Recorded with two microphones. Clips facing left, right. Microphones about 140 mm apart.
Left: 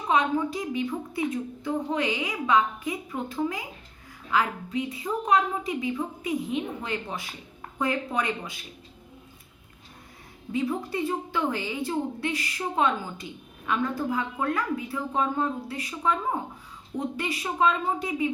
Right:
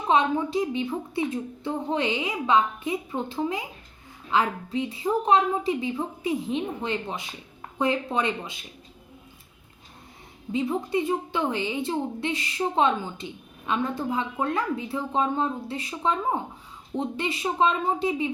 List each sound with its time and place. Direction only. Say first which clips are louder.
0.1 s a woman's voice: right 2 dB; 25° right (ahead or behind)
10.5 s a woman's voice: right 3 dB; 20° right (ahead or behind)